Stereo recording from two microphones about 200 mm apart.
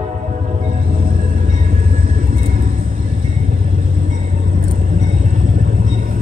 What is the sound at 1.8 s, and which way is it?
Vehicle, 40° right (ahead or behind).